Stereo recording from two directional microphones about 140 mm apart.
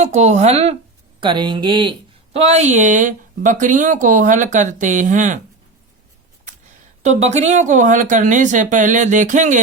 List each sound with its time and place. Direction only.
0.0 s speech: 55° right (ahead or behind)
1.2 s speech: 35° right (ahead or behind); by 5.4 s 65° right (ahead or behind)
7.0 s speech: 55° right (ahead or behind)